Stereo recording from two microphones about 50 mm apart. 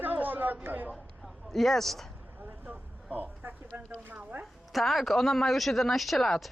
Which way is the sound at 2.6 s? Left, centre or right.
Right.